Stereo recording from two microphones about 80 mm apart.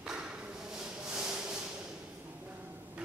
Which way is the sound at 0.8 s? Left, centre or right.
Centre.